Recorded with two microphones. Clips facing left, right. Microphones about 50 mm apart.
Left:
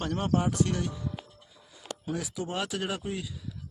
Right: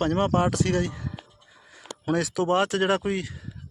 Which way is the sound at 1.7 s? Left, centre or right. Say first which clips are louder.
Right 8 dB; right.